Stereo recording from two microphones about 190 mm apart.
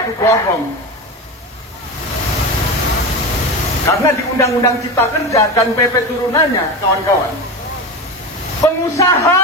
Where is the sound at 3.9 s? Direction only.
15° left (ahead or behind).